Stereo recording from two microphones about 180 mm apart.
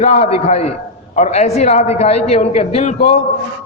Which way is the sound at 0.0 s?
35° left (ahead or behind).